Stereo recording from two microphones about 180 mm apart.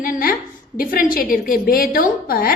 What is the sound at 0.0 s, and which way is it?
Speech, 55° left (ahead or behind).